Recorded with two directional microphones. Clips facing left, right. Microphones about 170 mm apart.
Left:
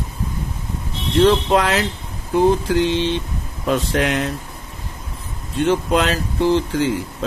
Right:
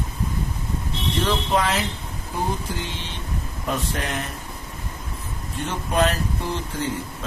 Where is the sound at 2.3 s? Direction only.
90° left.